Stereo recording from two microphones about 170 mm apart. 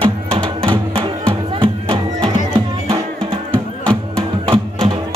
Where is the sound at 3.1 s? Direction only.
5° left (ahead or behind).